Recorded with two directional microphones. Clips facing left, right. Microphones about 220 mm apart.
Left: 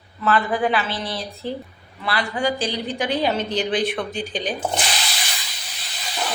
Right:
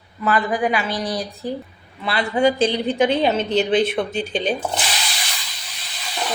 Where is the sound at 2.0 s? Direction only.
25° right (ahead or behind).